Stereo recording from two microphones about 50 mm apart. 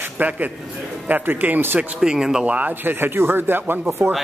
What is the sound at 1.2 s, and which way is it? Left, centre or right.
Speech, right.